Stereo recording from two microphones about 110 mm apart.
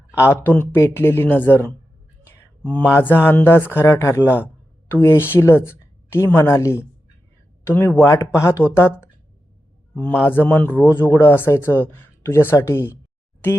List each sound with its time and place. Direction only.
0.3 s a man's voice: 20° left (ahead or behind)